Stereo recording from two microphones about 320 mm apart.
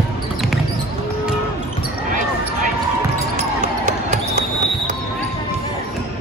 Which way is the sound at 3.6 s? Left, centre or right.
Right.